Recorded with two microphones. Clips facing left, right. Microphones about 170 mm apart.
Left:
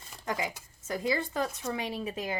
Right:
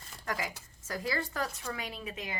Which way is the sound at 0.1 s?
20° left (ahead or behind).